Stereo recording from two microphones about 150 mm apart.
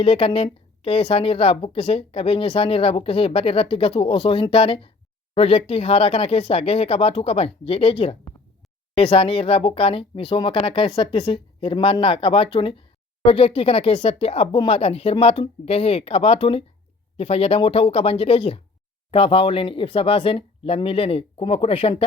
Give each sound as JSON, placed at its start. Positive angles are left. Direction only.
{"t": 0.0, "sound": "a woman's voice", "side_deg": 40}